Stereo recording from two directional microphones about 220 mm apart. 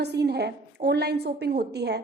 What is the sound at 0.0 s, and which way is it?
A woman's voice, 50° right (ahead or behind).